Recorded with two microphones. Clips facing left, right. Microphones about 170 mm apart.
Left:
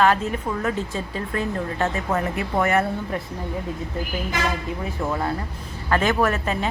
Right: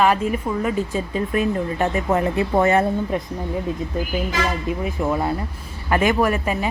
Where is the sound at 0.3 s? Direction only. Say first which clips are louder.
Right 3 dB; 10° right (ahead or behind); by 3.2 s 25° right (ahead or behind).